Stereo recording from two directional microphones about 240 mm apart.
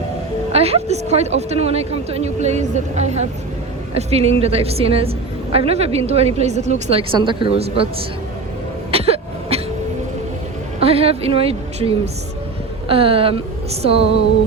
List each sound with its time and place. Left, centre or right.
0.5 s a woman's voice: right
8.9 s cough: right
10.8 s a woman's voice: right